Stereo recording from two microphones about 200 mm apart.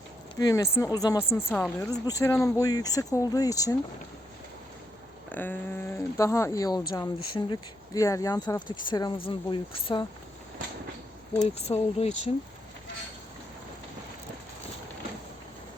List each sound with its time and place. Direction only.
0.3 s speech: 20° left (ahead or behind)
5.3 s speech: 10° left (ahead or behind); by 10.1 s 25° left (ahead or behind)
11.4 s speech: 30° left (ahead or behind)